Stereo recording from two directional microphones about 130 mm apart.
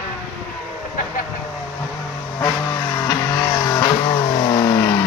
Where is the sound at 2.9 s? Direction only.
25° left (ahead or behind).